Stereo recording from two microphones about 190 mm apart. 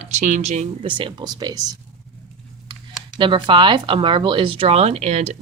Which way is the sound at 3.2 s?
25° right (ahead or behind).